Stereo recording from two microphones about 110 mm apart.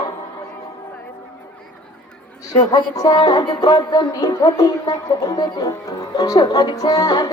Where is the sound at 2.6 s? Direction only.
35° left (ahead or behind).